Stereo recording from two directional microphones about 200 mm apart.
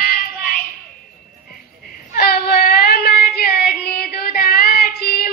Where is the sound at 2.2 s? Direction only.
50° left (ahead or behind).